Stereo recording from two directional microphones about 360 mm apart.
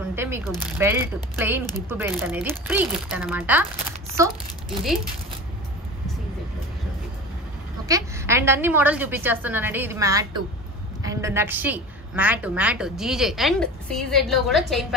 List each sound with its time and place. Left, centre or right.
0.1 s a woman's voice: centre
7.9 s a woman's voice: centre